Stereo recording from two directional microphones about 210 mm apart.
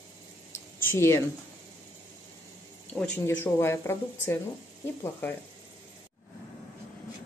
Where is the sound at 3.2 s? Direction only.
10° left (ahead or behind).